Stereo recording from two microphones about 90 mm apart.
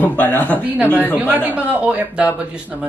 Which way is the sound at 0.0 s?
20° left (ahead or behind).